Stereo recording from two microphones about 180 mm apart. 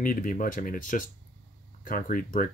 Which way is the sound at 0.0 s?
50° left (ahead or behind).